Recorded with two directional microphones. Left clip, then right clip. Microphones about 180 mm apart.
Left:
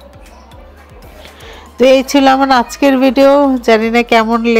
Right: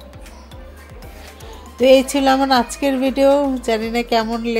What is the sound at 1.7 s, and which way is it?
A woman's voice, 25° left (ahead or behind).